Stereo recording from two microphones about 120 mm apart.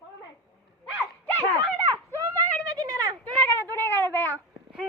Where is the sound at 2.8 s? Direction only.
30° right (ahead or behind).